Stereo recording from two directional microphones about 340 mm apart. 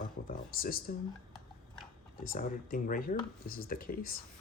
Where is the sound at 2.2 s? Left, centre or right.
Left.